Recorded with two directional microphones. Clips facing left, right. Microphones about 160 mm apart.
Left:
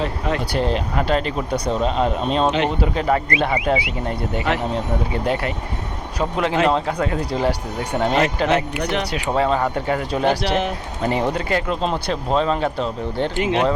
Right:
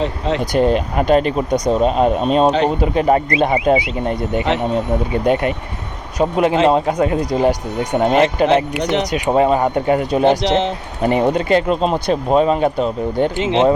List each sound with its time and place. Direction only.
0.0 s speech: 20° right (ahead or behind)
2.4 s speech: 35° right (ahead or behind)
2.8 s speech: 20° right (ahead or behind)
7.9 s speech: 25° right (ahead or behind)